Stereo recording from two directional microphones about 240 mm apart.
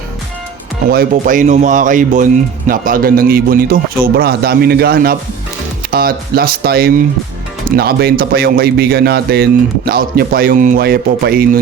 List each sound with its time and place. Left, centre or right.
0.9 s speech: right